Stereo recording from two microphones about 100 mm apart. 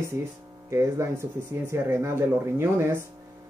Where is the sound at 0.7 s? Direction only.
30° right (ahead or behind).